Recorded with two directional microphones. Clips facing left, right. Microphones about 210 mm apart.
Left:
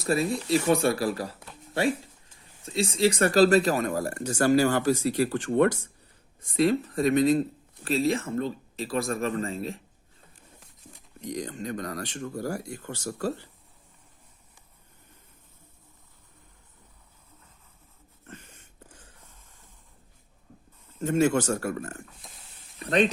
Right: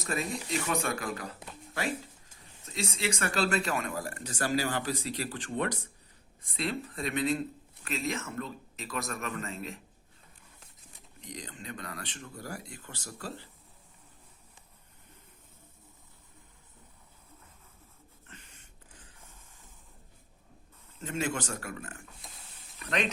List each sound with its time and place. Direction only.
0.0 s a man's voice: 35° left (ahead or behind)
2.6 s a man's voice: 30° left (ahead or behind)
11.2 s speech: 45° left (ahead or behind)
18.3 s a sound: 45° left (ahead or behind)
21.0 s speech: 45° left (ahead or behind)